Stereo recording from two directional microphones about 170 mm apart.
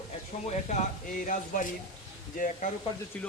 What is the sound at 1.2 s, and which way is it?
Speech, 50° left (ahead or behind).